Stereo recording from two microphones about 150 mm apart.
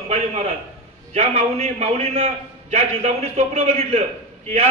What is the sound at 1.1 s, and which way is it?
A man's voice, 45° right (ahead or behind).